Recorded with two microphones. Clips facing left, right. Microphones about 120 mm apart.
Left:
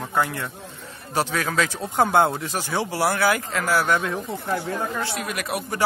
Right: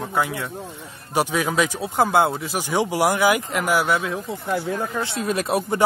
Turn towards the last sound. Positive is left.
turn(degrees=-25)  # may be behind; listen again after turning